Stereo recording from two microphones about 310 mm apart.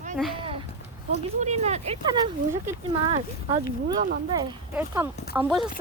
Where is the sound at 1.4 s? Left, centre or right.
Right.